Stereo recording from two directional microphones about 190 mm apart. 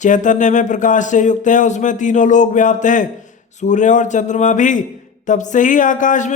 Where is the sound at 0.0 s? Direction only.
40° left (ahead or behind).